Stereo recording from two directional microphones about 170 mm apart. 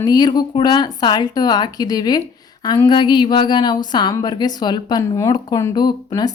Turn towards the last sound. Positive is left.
turn(degrees=25)  # may be behind; listen again after turning